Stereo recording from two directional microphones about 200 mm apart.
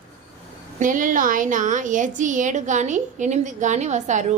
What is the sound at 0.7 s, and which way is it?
A woman's voice, 40° right (ahead or behind).